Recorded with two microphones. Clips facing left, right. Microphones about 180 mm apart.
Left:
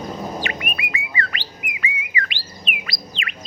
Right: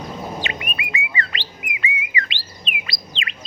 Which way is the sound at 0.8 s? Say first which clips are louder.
Even; 25° right (ahead or behind).